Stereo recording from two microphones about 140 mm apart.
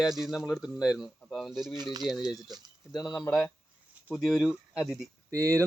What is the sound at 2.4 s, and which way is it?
Speech, 30° right (ahead or behind).